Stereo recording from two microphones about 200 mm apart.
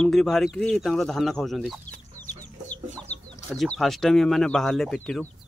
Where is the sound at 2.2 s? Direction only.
90° left.